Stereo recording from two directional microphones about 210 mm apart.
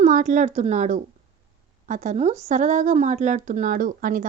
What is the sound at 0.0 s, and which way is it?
A child's voice, 35° right (ahead or behind).